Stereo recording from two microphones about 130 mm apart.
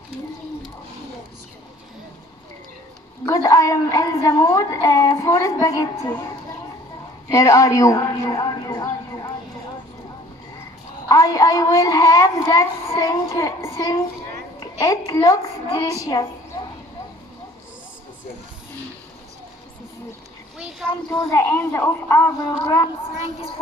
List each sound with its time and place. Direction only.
3.3 s a woman's voice: 25° left (ahead or behind)
11.1 s a woman's voice: 25° left (ahead or behind)
21.3 s a woman's voice: 20° left (ahead or behind)